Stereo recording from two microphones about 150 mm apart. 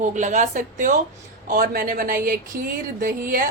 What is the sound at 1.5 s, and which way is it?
A woman's voice, 75° right (ahead or behind).